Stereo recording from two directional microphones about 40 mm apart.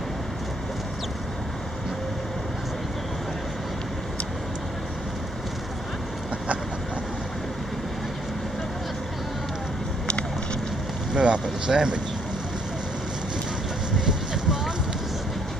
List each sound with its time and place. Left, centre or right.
10.1 s vehicle: left
11.1 s speech: right
14.1 s a sound: centre